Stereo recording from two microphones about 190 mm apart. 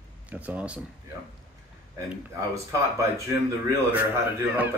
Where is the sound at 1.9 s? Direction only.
15° right (ahead or behind).